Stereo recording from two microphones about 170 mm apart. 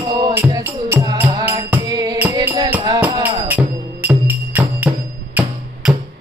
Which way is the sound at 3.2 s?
10° right (ahead or behind).